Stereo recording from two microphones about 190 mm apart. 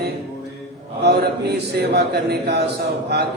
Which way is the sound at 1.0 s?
60° right (ahead or behind).